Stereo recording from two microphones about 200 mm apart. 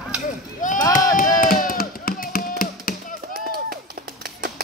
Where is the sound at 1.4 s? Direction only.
45° left (ahead or behind).